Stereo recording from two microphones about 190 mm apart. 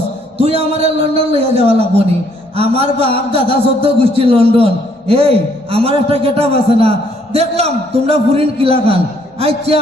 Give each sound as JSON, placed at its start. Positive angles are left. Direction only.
{"t": 0.3, "sound": "a man's voice", "side_deg": -30}